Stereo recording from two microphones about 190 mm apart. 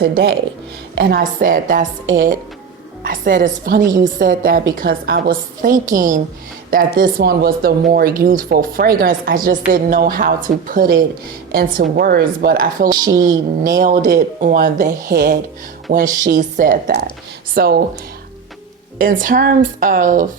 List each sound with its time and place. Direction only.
0.0 s speech: 55° right (ahead or behind)
3.0 s speech: 45° right (ahead or behind)
18.9 s speech: 45° right (ahead or behind)